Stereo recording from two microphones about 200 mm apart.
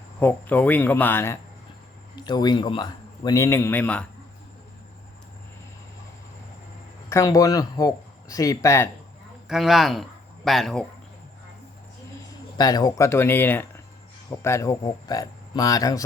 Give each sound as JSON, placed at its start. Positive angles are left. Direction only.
{"t": 0.2, "sound": "a man's voice", "side_deg": 10}
{"t": 7.1, "sound": "speech", "side_deg": 15}
{"t": 9.5, "sound": "speech", "side_deg": 0}
{"t": 12.5, "sound": "speech", "side_deg": 20}